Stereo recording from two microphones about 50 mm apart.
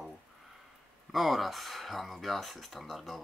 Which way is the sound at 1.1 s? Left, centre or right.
Centre.